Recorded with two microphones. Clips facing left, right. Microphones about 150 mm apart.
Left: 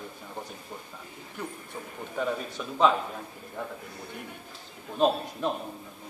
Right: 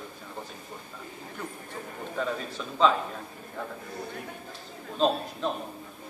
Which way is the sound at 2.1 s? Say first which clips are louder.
Left 1 dB; 10° left (ahead or behind).